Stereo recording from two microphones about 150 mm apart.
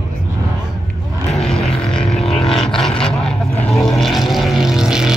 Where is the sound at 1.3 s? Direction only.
Centre (ahead or behind).